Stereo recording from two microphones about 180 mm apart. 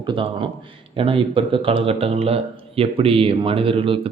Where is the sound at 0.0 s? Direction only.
30° right (ahead or behind).